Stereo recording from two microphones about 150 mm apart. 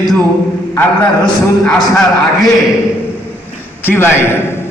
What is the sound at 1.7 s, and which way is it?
Speech, 5° left (ahead or behind).